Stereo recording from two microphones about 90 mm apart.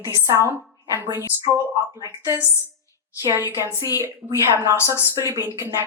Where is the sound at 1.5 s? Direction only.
40° right (ahead or behind).